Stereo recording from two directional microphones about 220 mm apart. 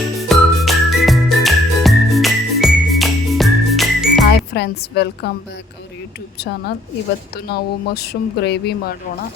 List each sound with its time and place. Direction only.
0.2 s music: centre (ahead or behind)
4.3 s a woman's voice: 50° left (ahead or behind)
6.3 s speech: 50° left (ahead or behind)